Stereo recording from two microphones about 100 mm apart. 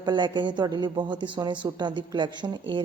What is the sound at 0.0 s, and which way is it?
A woman's voice, 50° right (ahead or behind).